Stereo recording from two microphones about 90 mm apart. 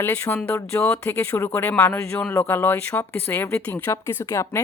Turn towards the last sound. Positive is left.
turn(degrees=30)  # may be behind; listen again after turning